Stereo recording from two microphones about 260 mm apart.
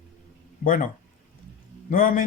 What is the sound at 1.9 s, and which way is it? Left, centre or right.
Speech, left.